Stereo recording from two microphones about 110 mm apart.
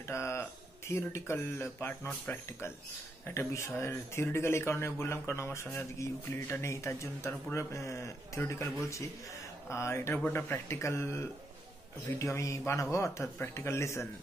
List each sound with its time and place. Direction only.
0.1 s a man's voice: 25° left (ahead or behind)